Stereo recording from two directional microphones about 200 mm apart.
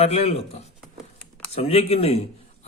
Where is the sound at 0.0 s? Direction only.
30° left (ahead or behind).